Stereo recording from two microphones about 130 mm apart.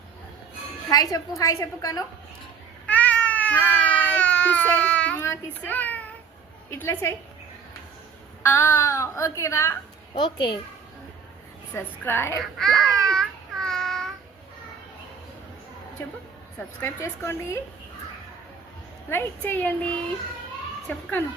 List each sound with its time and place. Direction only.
0.9 s a child's voice: 30° left (ahead or behind)
2.8 s cat: 10° left (ahead or behind)
6.7 s a child's voice: 15° left (ahead or behind)
8.4 s speech: 20° left (ahead or behind)
10.2 s a child's voice: 35° left (ahead or behind)
11.7 s a child's voice: 15° left (ahead or behind)
12.4 s a sound: centre (ahead or behind)
16.8 s speech: 20° left (ahead or behind)
19.1 s a child's voice: 15° left (ahead or behind)
20.9 s a child's voice: 10° left (ahead or behind)